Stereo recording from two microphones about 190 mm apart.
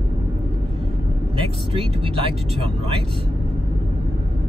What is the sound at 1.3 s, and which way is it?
Speech, 30° right (ahead or behind).